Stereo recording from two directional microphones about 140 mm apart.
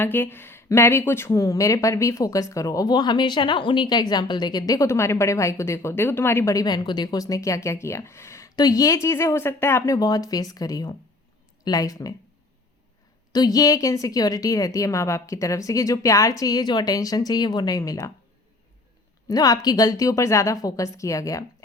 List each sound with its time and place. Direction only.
0.0 s speech: 15° left (ahead or behind)
13.3 s speech: 25° left (ahead or behind)
19.3 s speech: 25° left (ahead or behind)